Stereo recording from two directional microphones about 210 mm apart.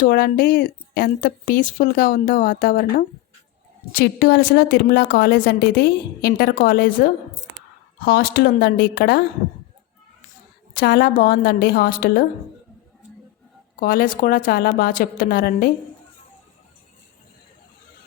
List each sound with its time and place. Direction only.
0.0 s a woman's voice: 45° left (ahead or behind)
3.9 s a woman's voice: 50° left (ahead or behind)
10.8 s a woman's voice: 50° left (ahead or behind)
13.7 s a woman's voice: 45° left (ahead or behind)